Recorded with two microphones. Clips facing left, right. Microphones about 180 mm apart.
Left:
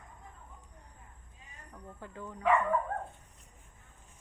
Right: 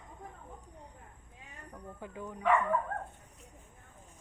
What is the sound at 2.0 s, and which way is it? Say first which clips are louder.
Speech: right 2 dB; 15° right (ahead or behind).